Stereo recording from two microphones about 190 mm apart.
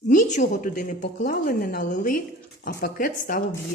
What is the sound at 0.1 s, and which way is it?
Speech, 40° left (ahead or behind).